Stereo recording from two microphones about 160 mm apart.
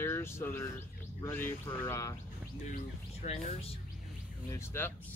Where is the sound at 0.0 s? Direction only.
15° left (ahead or behind).